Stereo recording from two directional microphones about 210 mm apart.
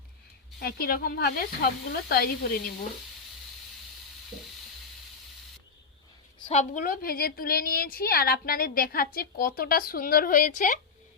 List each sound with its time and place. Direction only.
0.6 s a woman's voice: 45° left (ahead or behind)
6.5 s a woman's voice: 35° left (ahead or behind)